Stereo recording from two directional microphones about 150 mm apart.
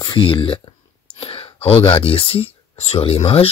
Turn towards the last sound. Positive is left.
turn(degrees=40)  # may be behind; listen again after turning